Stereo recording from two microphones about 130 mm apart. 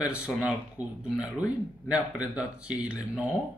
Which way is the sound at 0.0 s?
5° right (ahead or behind).